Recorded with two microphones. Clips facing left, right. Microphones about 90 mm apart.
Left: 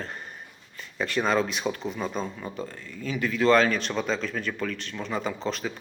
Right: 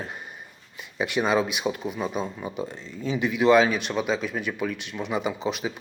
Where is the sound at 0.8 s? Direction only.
15° right (ahead or behind).